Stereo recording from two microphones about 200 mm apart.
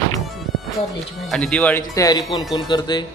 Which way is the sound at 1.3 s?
5° left (ahead or behind).